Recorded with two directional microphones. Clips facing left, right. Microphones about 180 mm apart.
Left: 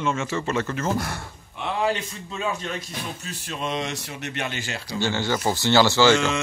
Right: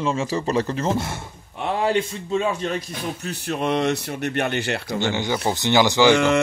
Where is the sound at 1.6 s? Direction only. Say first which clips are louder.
Right 3 dB; 40° right (ahead or behind).